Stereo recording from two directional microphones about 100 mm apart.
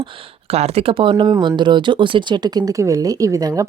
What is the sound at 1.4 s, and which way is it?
Speech, 50° right (ahead or behind).